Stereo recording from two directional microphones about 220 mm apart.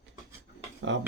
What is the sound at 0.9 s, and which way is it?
Speech, 55° right (ahead or behind).